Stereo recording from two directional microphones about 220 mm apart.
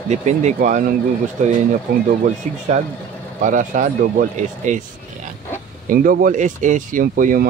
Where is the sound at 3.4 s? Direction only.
35° right (ahead or behind).